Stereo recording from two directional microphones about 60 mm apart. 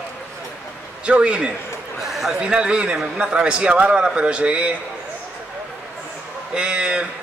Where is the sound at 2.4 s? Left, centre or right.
Centre.